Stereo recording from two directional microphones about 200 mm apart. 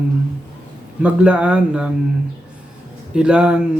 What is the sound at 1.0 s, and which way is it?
Speech, 5° right (ahead or behind).